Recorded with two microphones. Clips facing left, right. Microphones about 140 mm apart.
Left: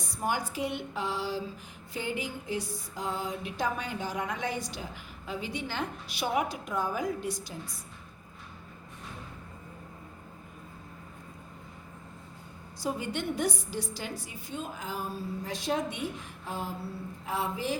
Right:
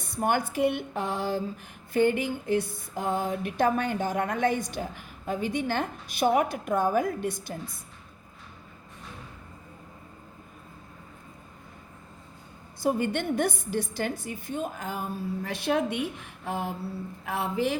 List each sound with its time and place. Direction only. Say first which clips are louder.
0.0 s a woman's voice: right 5 dB; 60° right (ahead or behind)
1.9 s music: right 11 dB; 55° right (ahead or behind)
12.8 s a woman's voice: right 6 dB; 55° right (ahead or behind)